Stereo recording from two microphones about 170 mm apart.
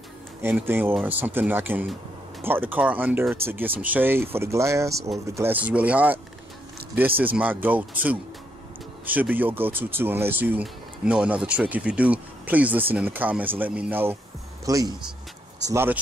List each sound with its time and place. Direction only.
0.4 s speech: 10° right (ahead or behind)